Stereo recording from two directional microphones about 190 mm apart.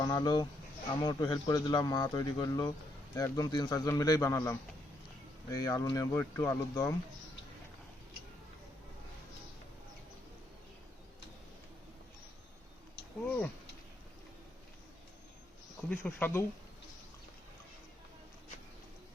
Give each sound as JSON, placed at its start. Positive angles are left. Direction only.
{"t": 0.0, "sound": "a man's voice", "side_deg": 20}
{"t": 13.2, "sound": "speech", "side_deg": 10}
{"t": 15.9, "sound": "speech", "side_deg": 5}